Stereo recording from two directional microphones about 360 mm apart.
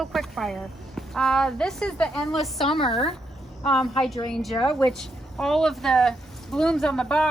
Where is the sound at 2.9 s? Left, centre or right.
Centre.